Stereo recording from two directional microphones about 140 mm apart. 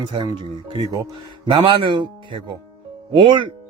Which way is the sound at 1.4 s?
35° right (ahead or behind).